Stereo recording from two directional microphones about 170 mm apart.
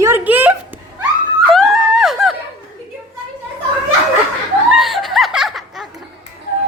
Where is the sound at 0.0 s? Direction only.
10° right (ahead or behind).